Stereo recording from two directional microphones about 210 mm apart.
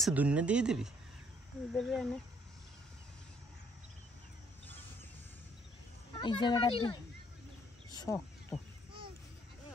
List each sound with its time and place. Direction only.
0.0 s speech: 5° right (ahead or behind)
6.1 s speech: 25° left (ahead or behind)
7.9 s a sound: 15° left (ahead or behind)